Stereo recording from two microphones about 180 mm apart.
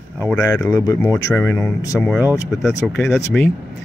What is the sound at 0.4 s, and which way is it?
Speech, 15° left (ahead or behind).